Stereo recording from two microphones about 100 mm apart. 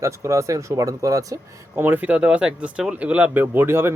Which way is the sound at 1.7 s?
20° right (ahead or behind).